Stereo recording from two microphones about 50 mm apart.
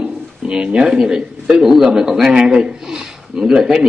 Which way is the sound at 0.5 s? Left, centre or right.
Centre.